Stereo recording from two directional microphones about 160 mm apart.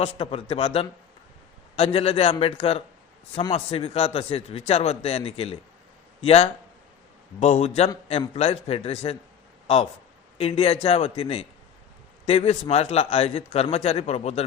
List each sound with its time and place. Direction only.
0.0 s a man's voice: 35° left (ahead or behind)
10.3 s a man's voice: 35° left (ahead or behind)